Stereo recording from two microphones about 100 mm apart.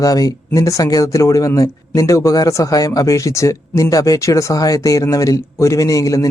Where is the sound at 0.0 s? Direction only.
35° left (ahead or behind).